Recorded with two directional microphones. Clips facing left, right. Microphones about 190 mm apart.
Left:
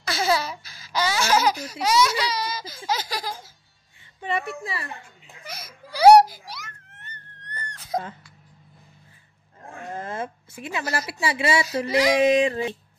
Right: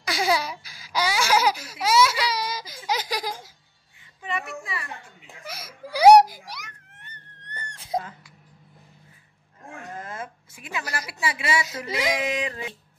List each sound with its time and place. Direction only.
0.0 s baby laughter: 15° right (ahead or behind)
4.2 s a woman's voice: 30° left (ahead or behind)
5.2 s a child's voice: 5° right (ahead or behind)
7.4 s a sound: 25° right (ahead or behind)
9.9 s a woman's voice: 30° left (ahead or behind)